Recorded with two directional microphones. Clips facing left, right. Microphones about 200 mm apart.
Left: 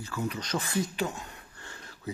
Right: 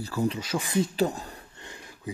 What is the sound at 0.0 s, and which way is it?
Speech, 35° right (ahead or behind).